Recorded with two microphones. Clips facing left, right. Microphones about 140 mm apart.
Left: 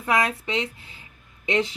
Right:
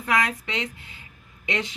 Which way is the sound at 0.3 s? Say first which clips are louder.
Left 3 dB; 30° left (ahead or behind).